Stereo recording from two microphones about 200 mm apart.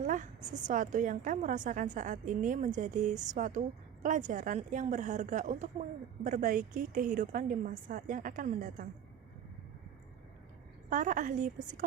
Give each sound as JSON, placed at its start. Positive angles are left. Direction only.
{"t": 0.0, "sound": "a sound", "side_deg": -40}
{"t": 0.5, "sound": "a woman's voice", "side_deg": -40}
{"t": 10.8, "sound": "a woman's voice", "side_deg": -40}